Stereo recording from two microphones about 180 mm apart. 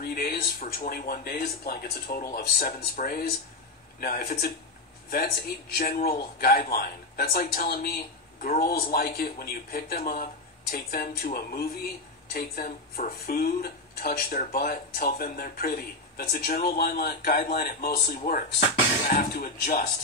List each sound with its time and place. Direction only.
0.0 s speech: 60° left (ahead or behind)